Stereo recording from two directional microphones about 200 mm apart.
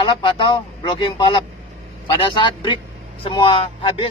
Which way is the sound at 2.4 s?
25° left (ahead or behind).